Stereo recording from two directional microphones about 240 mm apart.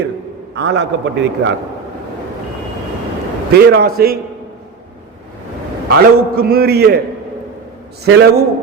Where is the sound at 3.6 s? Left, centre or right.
Right.